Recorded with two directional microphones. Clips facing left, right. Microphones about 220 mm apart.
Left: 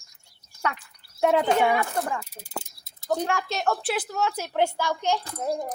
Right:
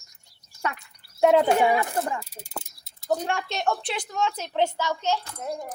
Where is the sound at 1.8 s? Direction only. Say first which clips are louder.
Even; 20° right (ahead or behind).